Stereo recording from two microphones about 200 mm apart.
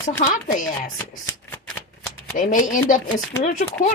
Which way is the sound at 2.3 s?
40° left (ahead or behind).